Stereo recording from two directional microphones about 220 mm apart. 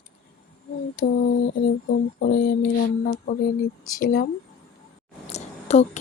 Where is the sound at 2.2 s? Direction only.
45° left (ahead or behind).